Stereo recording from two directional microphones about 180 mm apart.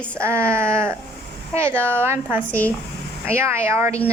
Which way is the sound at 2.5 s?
10° left (ahead or behind).